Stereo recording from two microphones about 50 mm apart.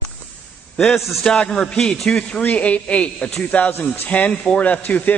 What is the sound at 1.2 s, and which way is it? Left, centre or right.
A man's voice, centre.